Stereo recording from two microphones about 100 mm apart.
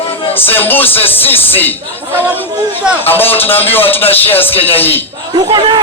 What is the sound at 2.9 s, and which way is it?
Music, 20° left (ahead or behind).